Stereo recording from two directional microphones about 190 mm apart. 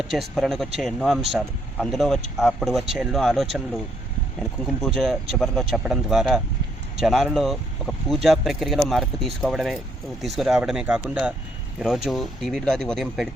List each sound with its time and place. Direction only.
0.0 s speech: centre (ahead or behind)